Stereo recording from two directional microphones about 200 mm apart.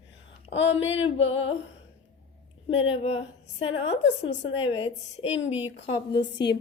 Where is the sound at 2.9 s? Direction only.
30° left (ahead or behind).